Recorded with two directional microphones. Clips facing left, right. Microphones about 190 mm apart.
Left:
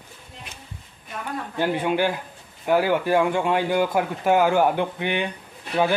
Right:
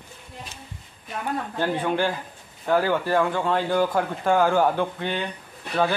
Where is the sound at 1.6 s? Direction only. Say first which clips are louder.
Left 2 dB; 10° left (ahead or behind).